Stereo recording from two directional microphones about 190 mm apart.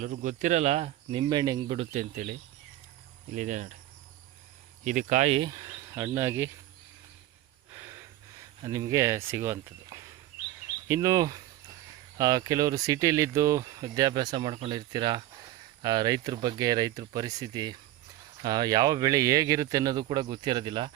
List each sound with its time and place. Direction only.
0.0 s speech: 45° right (ahead or behind)
3.3 s speech: 40° right (ahead or behind)
4.8 s speech: 40° right (ahead or behind)
5.4 s insect: 20° right (ahead or behind)
7.7 s a sound: 15° right (ahead or behind)
8.6 s speech: 20° right (ahead or behind)